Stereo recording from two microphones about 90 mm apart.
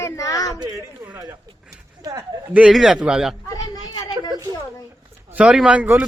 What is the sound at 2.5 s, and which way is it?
Speech, 15° right (ahead or behind).